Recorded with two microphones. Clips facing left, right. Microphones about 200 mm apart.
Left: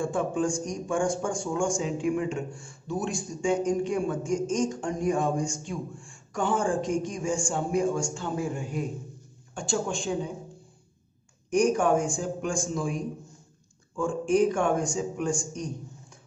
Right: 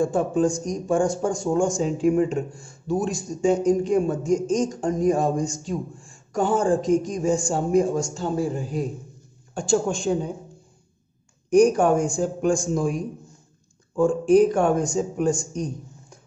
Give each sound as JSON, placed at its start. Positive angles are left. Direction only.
{"t": 0.0, "sound": "speech", "side_deg": -40}
{"t": 11.5, "sound": "speech", "side_deg": -40}
{"t": 13.9, "sound": "speech", "side_deg": -40}